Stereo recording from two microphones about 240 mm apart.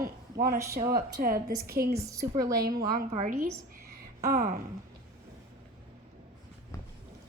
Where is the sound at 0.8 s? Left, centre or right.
Right.